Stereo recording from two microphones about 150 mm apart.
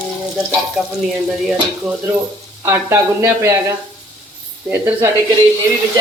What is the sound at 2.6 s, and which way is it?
Speech, 15° right (ahead or behind).